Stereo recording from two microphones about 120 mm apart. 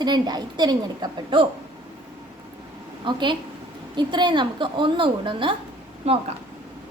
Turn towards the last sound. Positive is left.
turn(degrees=-60)  # may be behind; listen again after turning